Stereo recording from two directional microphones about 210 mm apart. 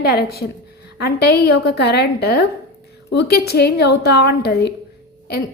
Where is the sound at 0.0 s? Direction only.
50° left (ahead or behind).